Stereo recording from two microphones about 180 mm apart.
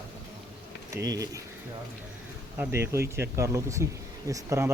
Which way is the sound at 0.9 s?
20° right (ahead or behind).